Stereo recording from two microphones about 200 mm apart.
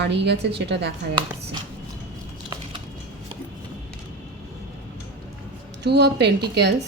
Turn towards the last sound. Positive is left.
turn(degrees=-55)  # may be behind; listen again after turning